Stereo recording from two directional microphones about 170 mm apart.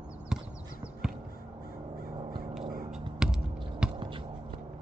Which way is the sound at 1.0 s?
5° right (ahead or behind).